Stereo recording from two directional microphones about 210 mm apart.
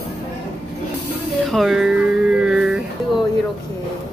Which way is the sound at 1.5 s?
Centre (ahead or behind).